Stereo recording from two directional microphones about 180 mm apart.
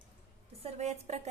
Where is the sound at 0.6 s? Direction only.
40° right (ahead or behind).